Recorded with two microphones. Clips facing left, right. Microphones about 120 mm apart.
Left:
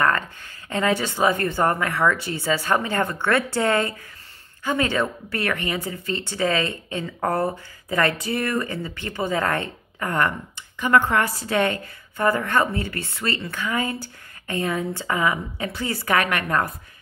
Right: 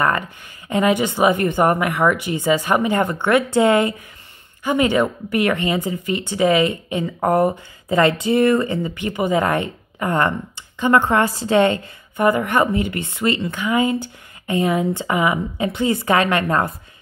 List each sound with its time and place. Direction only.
0.7 s a woman's voice: 15° right (ahead or behind)